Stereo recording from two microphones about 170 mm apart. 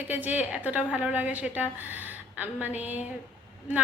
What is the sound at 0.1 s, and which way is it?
A woman's voice, 10° right (ahead or behind).